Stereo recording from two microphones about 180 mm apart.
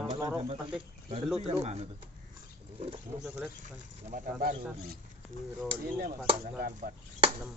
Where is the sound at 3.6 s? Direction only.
50° right (ahead or behind).